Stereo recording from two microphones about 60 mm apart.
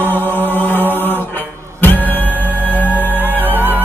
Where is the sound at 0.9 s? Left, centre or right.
Left.